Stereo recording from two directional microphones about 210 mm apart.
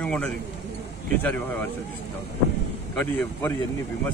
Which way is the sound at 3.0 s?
10° left (ahead or behind).